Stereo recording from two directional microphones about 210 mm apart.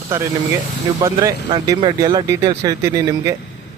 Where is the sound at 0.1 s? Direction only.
10° right (ahead or behind).